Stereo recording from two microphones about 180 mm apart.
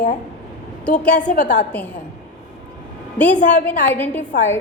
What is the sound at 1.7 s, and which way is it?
Speech, 10° left (ahead or behind).